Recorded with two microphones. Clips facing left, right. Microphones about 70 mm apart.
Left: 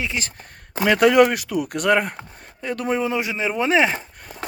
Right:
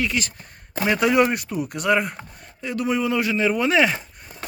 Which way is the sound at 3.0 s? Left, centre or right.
Left.